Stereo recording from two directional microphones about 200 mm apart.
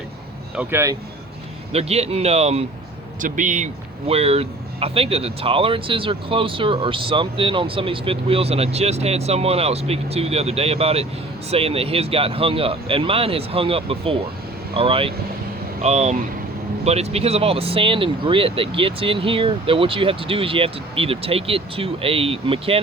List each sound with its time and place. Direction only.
0.5 s speech: 10° right (ahead or behind)
1.7 s a man's voice: 30° right (ahead or behind)